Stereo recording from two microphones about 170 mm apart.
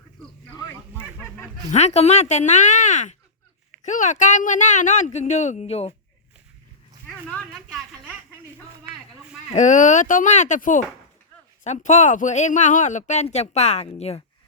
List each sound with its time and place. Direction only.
1.7 s speech: 40° left (ahead or behind)
7.1 s a sound: 5° left (ahead or behind)
9.5 s speech: 45° left (ahead or behind)